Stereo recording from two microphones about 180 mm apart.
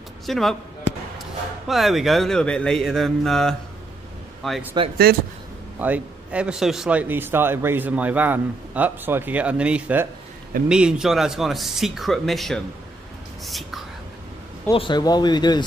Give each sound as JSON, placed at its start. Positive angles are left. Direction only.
{"t": 0.3, "sound": "speech", "side_deg": 0}
{"t": 1.7, "sound": "speech", "side_deg": 0}
{"t": 5.1, "sound": "speech", "side_deg": -60}
{"t": 5.8, "sound": "a man's voice", "side_deg": -10}
{"t": 14.7, "sound": "speech", "side_deg": 25}